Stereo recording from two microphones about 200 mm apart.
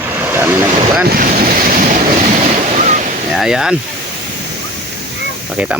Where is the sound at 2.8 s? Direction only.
35° right (ahead or behind).